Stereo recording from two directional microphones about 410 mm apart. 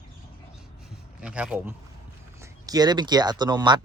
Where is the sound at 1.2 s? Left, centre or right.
Centre.